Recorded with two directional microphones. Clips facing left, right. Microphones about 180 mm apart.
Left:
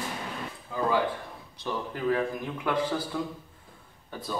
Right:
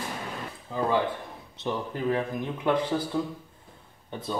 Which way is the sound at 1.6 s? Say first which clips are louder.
Right 2 dB; 20° right (ahead or behind).